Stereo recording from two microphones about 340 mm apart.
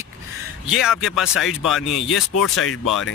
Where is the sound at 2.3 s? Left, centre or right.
Left.